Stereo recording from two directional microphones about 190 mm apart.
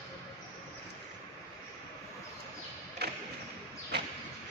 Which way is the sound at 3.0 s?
60° right (ahead or behind).